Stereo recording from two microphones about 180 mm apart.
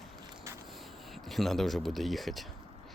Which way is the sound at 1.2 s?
Centre (ahead or behind).